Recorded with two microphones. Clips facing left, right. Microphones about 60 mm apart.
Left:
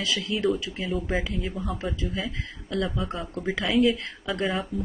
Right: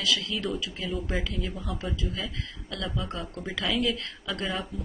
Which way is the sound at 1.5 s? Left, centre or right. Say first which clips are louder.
Left 4 dB; centre.